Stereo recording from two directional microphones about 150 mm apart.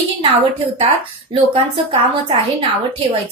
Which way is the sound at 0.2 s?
35° right (ahead or behind).